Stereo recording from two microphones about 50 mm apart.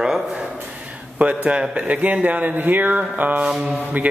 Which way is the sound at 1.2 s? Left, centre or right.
Right.